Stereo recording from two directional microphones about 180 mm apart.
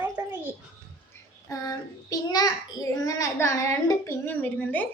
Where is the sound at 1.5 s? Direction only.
20° left (ahead or behind).